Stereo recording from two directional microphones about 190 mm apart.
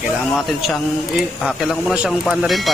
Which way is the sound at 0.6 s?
Centre (ahead or behind).